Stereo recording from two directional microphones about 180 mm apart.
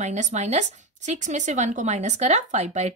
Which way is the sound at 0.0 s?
40° right (ahead or behind).